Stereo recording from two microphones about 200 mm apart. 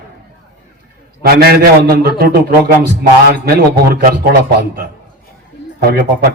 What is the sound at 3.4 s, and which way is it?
Speech, 50° right (ahead or behind).